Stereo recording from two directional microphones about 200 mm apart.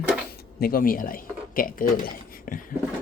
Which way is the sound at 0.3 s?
45° left (ahead or behind).